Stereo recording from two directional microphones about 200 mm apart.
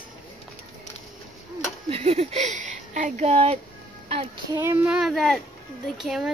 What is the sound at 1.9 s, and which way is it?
Speech, 30° right (ahead or behind).